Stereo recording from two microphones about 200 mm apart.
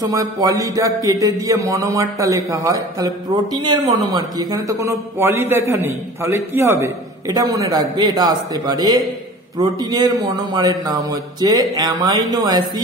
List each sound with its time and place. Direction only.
0.0 s a man's voice: 20° right (ahead or behind)